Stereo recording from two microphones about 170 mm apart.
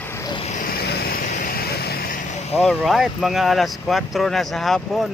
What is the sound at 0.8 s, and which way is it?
Vehicle, 70° left (ahead or behind).